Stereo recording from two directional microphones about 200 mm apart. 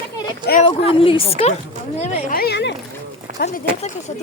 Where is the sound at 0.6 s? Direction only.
30° left (ahead or behind).